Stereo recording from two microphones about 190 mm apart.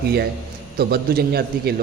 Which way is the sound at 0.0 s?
55° right (ahead or behind).